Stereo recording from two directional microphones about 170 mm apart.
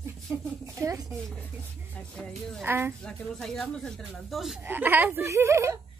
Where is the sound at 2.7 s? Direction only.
15° right (ahead or behind).